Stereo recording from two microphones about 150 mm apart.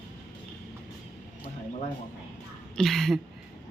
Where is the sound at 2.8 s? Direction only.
Centre (ahead or behind).